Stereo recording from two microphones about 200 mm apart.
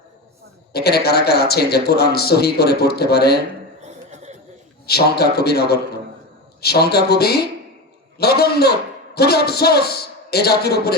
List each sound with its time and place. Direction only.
0.7 s a man's voice: 50° left (ahead or behind)
3.8 s a sound: 35° right (ahead or behind)
4.9 s a man's voice: 50° left (ahead or behind)